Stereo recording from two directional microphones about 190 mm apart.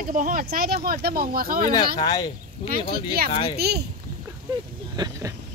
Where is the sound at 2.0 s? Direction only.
20° left (ahead or behind).